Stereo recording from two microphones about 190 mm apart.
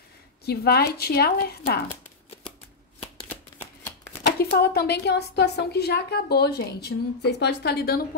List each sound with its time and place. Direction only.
0.5 s a woman's voice: 55° left (ahead or behind)
4.4 s a woman's voice: 55° left (ahead or behind)